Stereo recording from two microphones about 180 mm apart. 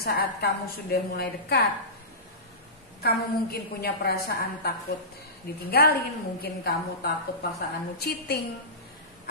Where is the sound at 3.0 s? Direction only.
60° left (ahead or behind).